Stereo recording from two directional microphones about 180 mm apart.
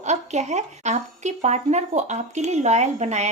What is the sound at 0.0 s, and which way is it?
Speech, 40° right (ahead or behind).